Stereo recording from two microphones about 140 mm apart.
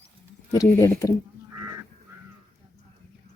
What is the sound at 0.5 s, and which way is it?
Speech, 25° left (ahead or behind).